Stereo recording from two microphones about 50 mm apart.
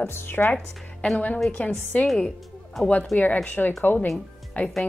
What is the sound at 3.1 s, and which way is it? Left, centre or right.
Speech, left.